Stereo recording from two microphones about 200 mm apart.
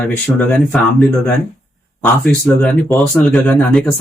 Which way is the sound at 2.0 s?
5° left (ahead or behind).